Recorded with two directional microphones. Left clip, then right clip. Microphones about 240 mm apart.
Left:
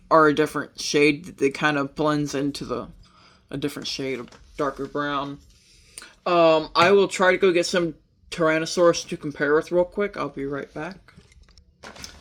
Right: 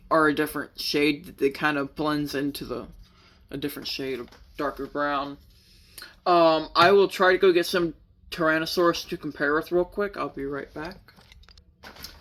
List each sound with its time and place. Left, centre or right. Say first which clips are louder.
0.1 s speech: left 5 dB; left